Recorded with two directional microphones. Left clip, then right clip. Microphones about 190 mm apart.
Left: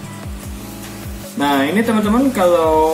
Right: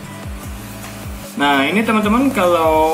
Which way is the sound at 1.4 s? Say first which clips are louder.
Right 1 dB; centre (ahead or behind).